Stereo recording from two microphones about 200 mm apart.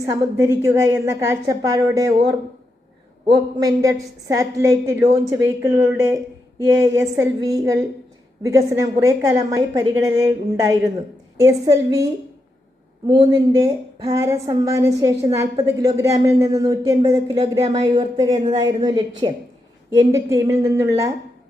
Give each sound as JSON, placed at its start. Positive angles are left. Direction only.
{"t": 0.0, "sound": "a woman's voice", "side_deg": -15}
{"t": 3.2, "sound": "a woman's voice", "side_deg": -20}
{"t": 13.1, "sound": "a woman's voice", "side_deg": -20}